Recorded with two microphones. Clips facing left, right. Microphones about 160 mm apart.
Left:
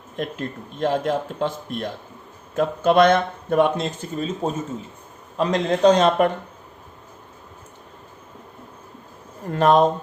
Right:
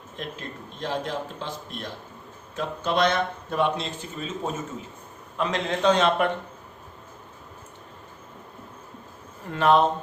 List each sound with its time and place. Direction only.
0.2 s speech: 55° left (ahead or behind)
5.4 s a man's voice: 40° left (ahead or behind)
9.5 s a man's voice: 40° left (ahead or behind)